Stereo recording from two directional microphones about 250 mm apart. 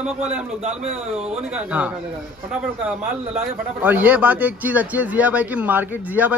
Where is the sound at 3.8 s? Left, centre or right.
Centre.